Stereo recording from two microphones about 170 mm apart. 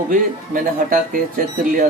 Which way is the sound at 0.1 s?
50° right (ahead or behind).